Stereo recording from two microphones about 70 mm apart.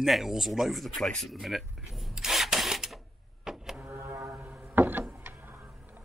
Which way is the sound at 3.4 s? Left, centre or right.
Centre.